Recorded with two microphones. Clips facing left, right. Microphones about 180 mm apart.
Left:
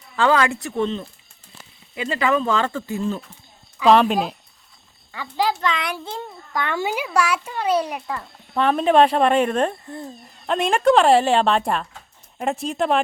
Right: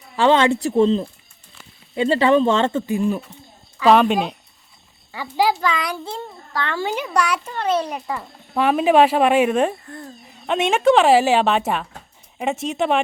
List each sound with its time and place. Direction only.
0.2 s speech: 25° right (ahead or behind)
3.8 s a woman's voice: centre (ahead or behind)
5.1 s a woman's voice: 10° right (ahead or behind)
6.1 s a child's voice: 15° left (ahead or behind)
8.0 s a woman's voice: 5° right (ahead or behind)